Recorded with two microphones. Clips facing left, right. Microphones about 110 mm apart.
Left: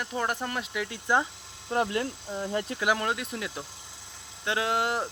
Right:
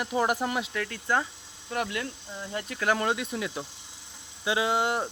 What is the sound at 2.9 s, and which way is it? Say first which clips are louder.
Speech: right 2 dB; centre (ahead or behind).